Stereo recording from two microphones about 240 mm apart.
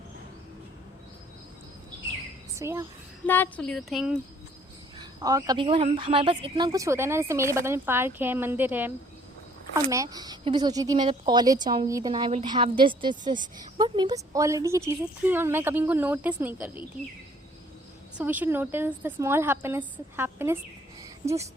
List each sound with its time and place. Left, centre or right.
2.6 s a woman's voice: centre
3.2 s speech: centre
4.9 s a woman's voice: centre
9.9 s a woman's voice: centre
18.2 s a woman's voice: centre